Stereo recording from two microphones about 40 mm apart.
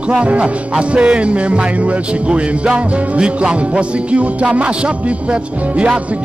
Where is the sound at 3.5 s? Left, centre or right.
Right.